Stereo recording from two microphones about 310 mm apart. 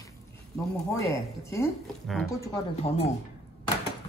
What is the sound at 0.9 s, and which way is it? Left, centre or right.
Speech, centre.